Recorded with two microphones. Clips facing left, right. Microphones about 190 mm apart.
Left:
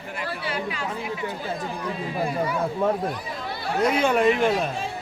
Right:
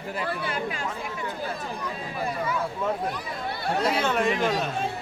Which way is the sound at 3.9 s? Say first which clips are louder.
Left 5 dB; 10° left (ahead or behind).